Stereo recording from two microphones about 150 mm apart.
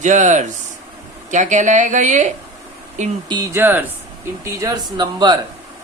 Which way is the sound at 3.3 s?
25° right (ahead or behind).